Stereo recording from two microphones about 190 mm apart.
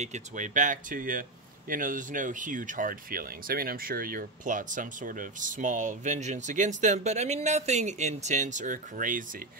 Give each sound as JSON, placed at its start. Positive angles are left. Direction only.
{"t": 0.0, "sound": "speech", "side_deg": -40}